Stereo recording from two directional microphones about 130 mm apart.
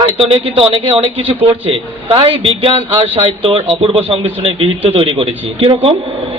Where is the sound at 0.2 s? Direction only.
45° right (ahead or behind).